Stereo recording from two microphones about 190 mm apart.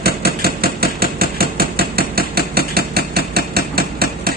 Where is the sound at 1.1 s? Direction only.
55° right (ahead or behind).